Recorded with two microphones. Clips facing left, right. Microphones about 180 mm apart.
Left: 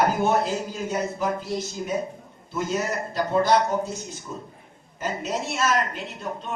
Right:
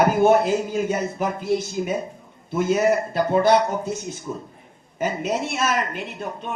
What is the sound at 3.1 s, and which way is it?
Speech, 60° right (ahead or behind).